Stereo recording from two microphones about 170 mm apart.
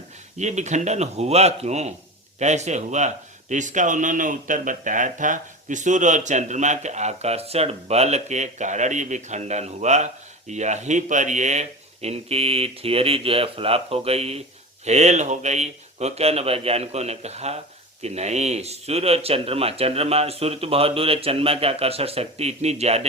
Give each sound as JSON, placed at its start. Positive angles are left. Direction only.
{"t": 0.3, "sound": "speech", "side_deg": -45}